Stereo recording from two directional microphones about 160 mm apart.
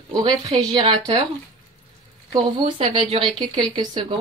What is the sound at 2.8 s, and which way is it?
A woman's voice, 35° right (ahead or behind).